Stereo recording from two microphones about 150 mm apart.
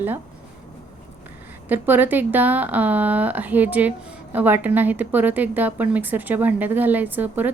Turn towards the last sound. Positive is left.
turn(degrees=-10)  # may be behind; listen again after turning